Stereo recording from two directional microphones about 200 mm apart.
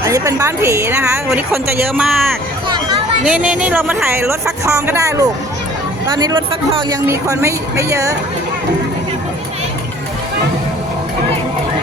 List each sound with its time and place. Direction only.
0.0 s speech: 15° right (ahead or behind)
3.2 s speech: 5° right (ahead or behind)